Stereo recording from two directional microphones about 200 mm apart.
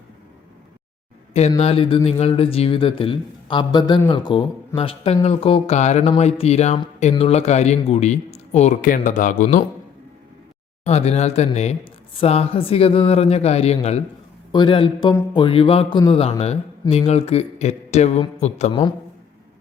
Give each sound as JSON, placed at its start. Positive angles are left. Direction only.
{"t": 1.3, "sound": "speech", "side_deg": 30}
{"t": 10.8, "sound": "speech", "side_deg": 30}